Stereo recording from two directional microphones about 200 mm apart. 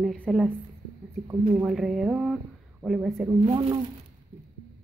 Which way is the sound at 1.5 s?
Centre (ahead or behind).